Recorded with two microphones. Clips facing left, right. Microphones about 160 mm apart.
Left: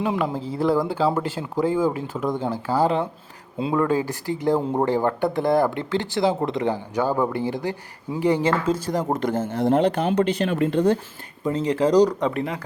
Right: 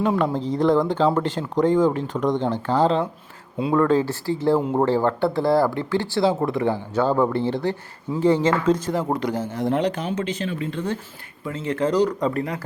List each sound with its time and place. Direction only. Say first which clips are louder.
0.0 s speech: right 3 dB; 10° left (ahead or behind)
3.6 s speech: right 3 dB; 25° left (ahead or behind)
9.1 s a man's voice: left 1 dB; 50° left (ahead or behind)
9.5 s speech: left 4 dB; 35° left (ahead or behind)
9.9 s speech: left 5 dB; 60° left (ahead or behind)
11.4 s speech: left 4 dB; 35° left (ahead or behind)
12.4 s speech: even; centre (ahead or behind)